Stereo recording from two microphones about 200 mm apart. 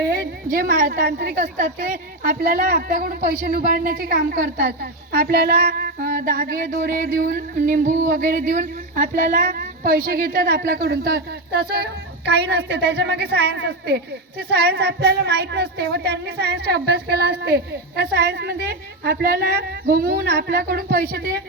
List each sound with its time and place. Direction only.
0.0 s a woman's voice: 45° right (ahead or behind)